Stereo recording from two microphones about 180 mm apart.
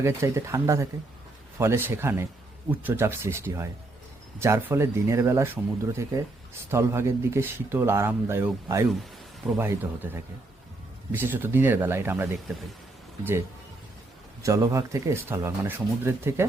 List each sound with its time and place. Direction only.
0.0 s speech: 15° right (ahead or behind)
14.4 s speech: 15° right (ahead or behind)